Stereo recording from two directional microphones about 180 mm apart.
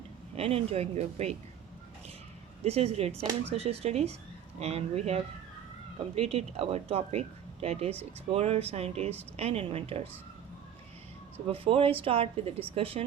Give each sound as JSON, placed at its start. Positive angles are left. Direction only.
{"t": 0.3, "sound": "speech", "side_deg": -35}
{"t": 2.6, "sound": "speech", "side_deg": -35}
{"t": 11.4, "sound": "speech", "side_deg": -30}